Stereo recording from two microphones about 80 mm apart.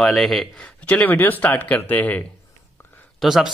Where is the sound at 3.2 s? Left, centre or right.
Centre.